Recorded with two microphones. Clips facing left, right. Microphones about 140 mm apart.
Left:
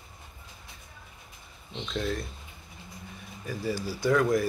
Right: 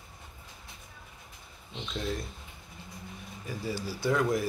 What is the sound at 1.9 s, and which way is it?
Speech, 15° right (ahead or behind).